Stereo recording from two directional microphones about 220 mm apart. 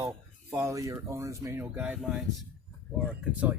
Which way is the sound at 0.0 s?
10° right (ahead or behind).